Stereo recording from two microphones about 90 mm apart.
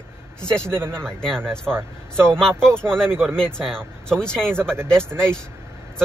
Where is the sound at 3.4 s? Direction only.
5° left (ahead or behind).